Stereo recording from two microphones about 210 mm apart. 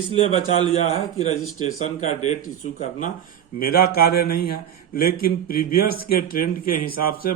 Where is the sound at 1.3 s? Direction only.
90° left.